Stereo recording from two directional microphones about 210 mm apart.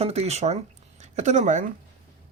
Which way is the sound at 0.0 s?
30° right (ahead or behind).